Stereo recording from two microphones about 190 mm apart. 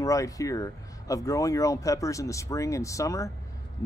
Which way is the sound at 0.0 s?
15° left (ahead or behind).